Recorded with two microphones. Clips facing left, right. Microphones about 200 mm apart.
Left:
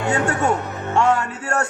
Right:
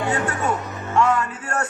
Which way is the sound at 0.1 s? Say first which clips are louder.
Left 7 dB; 30° left (ahead or behind).